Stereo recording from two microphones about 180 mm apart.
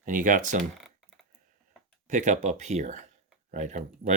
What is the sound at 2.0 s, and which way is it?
Speech, 45° right (ahead or behind).